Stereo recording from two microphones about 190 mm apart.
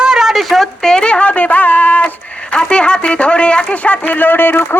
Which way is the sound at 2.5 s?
5° left (ahead or behind).